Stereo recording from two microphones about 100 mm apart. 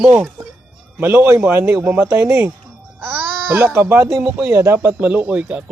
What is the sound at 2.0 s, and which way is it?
Speech, 25° right (ahead or behind).